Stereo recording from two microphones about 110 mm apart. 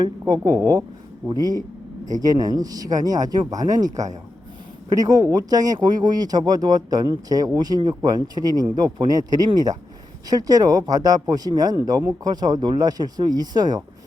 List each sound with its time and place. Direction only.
0.4 s speech: 30° right (ahead or behind)